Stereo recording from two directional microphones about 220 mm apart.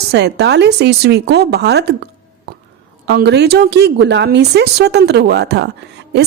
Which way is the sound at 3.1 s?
50° right (ahead or behind).